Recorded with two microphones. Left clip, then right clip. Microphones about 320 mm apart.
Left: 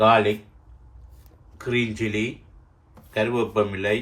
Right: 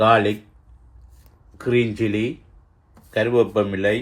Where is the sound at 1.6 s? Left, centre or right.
Centre.